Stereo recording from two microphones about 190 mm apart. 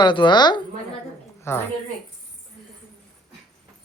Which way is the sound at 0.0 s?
25° left (ahead or behind).